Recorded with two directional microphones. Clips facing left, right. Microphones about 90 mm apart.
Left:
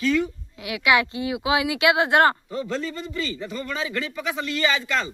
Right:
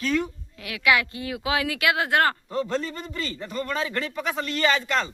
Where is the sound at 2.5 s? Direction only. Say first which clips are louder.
Right 1 dB; 45° right (ahead or behind).